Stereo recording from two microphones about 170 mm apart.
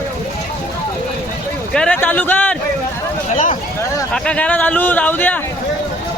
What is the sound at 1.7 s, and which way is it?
Speech, 10° left (ahead or behind).